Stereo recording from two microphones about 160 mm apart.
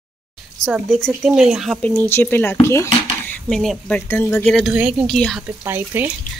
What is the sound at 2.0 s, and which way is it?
Speech, 15° left (ahead or behind).